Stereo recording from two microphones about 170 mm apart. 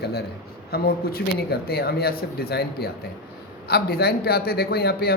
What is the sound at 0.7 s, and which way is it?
A man's voice, 65° left (ahead or behind).